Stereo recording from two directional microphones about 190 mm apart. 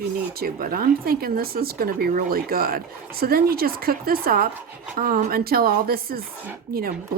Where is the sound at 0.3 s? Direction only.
50° right (ahead or behind).